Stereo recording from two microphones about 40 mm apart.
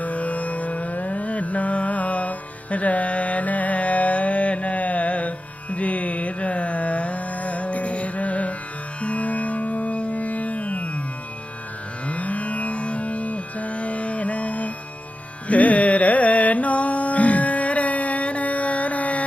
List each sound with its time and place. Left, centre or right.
0.0 s music: left
12.1 s music: left
15.4 s carnatic music: left